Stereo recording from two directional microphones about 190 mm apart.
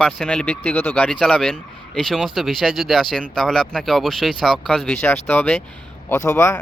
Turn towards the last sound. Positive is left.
turn(degrees=15)  # may be behind; listen again after turning